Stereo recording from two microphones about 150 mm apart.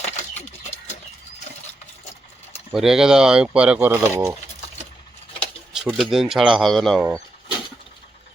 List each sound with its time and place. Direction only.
0.0 s a sound: 45° left (ahead or behind)
2.7 s speech: 5° right (ahead or behind)
5.7 s speech: centre (ahead or behind)